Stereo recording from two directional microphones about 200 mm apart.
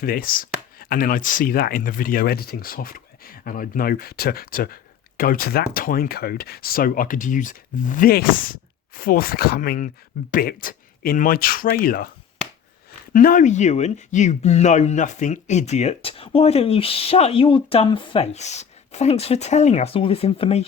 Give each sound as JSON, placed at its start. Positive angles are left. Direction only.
{"t": 0.0, "sound": "speech", "side_deg": 45}
{"t": 13.1, "sound": "speech", "side_deg": 40}